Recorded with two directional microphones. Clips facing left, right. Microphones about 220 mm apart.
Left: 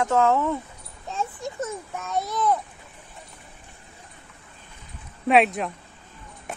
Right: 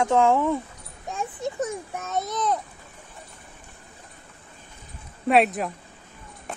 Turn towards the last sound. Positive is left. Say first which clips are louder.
# left 1 dB
turn(degrees=0)  # may be behind; listen again after turning